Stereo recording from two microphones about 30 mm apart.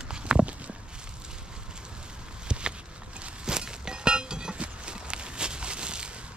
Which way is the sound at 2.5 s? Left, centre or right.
Right.